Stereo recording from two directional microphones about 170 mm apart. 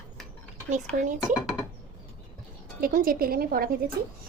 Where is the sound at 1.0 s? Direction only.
50° right (ahead or behind).